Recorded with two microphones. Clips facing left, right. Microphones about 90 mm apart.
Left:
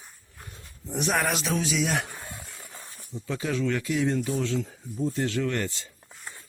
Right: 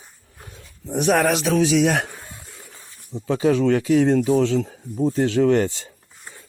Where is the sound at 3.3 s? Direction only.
90° right.